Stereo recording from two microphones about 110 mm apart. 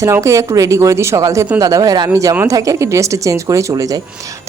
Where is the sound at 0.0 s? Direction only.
25° right (ahead or behind).